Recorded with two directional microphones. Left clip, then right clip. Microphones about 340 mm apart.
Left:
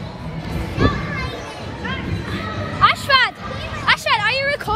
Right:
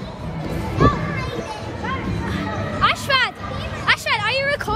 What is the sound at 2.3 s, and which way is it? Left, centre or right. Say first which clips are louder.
Hubbub: even; centre.